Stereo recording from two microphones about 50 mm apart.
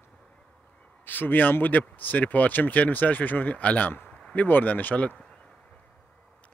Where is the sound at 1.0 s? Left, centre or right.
Left.